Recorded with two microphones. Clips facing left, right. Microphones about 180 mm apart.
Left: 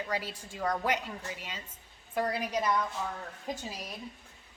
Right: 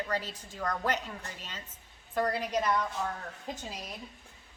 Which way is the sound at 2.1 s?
10° left (ahead or behind).